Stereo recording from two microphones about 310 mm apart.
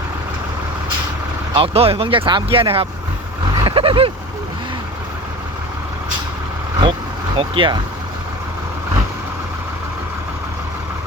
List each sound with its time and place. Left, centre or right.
1.5 s speech: centre
3.6 s vehicle: centre
7.3 s speech: centre